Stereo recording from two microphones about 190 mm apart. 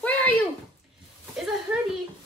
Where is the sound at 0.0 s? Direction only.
10° left (ahead or behind).